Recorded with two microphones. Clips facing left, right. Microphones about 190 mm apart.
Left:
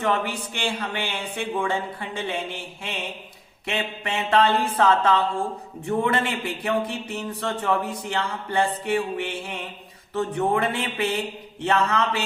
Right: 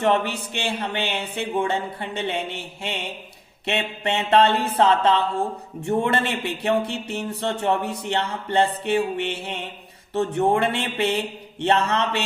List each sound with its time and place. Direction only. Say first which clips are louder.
0.0 s speech: right 3 dB; 25° right (ahead or behind)